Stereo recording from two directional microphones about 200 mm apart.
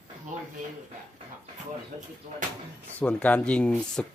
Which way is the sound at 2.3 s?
40° right (ahead or behind).